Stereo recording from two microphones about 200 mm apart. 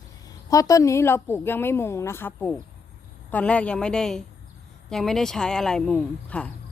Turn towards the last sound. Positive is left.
turn(degrees=5)  # may be behind; listen again after turning